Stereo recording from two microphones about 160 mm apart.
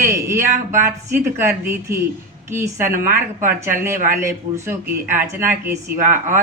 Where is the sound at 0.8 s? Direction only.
15° right (ahead or behind).